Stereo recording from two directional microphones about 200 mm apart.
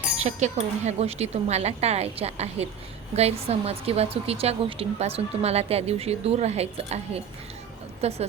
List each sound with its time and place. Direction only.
0.2 s a woman's voice: 35° right (ahead or behind)